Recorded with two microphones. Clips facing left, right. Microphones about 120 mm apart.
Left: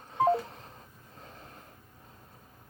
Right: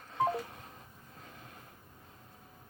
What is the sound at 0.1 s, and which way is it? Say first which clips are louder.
Telephone dialing: left 6 dB; 30° left (ahead or behind).